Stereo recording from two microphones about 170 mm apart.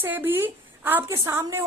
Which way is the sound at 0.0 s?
10° right (ahead or behind).